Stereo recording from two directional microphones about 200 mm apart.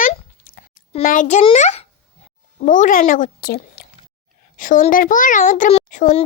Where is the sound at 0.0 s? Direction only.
45° left (ahead or behind).